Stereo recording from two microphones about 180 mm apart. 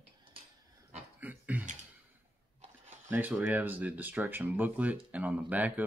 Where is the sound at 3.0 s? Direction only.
10° right (ahead or behind).